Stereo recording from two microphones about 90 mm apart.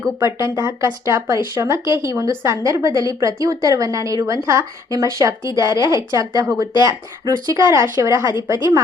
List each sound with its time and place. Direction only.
0.3 s a woman's voice: 35° right (ahead or behind)